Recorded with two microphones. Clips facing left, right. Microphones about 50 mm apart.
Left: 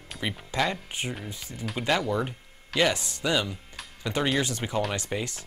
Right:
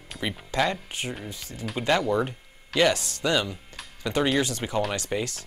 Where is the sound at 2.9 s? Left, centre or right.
Centre.